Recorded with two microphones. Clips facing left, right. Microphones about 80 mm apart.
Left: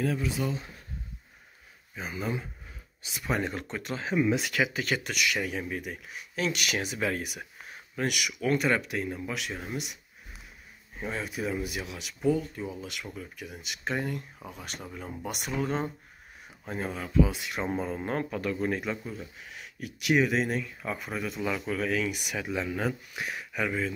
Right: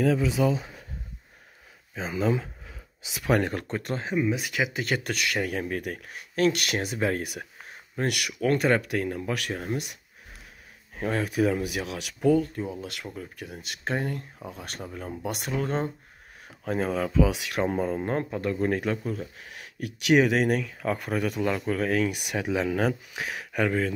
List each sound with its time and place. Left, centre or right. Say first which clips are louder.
2.0 s speech: right 7 dB; right
4.2 s speech: left 1 dB; centre
4.5 s speech: even; centre
5.0 s speech: right 2 dB; right
8.8 s speech: right 4 dB; right
11.0 s speech: right 8 dB; right
12.8 s speech: right 2 dB; right
16.6 s speech: right 8 dB; right
17.6 s speech: right 5 dB; right
21.5 s speech: right 4 dB; right
22.5 s speech: right 6 dB; right
23.5 s speech: right 5 dB; right